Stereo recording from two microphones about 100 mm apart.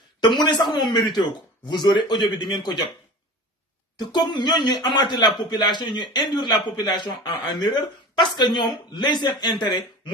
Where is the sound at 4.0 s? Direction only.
50° left (ahead or behind).